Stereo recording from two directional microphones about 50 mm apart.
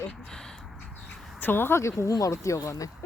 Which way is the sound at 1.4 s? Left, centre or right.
Left.